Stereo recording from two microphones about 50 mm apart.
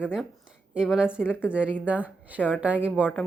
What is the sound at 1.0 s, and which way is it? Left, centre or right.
Speech, centre.